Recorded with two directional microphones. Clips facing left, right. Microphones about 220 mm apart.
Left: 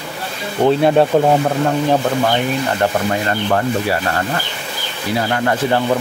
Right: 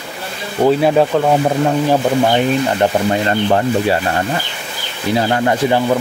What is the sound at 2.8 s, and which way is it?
Speech, 25° right (ahead or behind).